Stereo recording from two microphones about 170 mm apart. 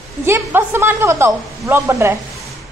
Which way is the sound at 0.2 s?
15° right (ahead or behind).